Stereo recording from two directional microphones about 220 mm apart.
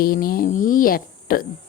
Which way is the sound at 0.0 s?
40° left (ahead or behind).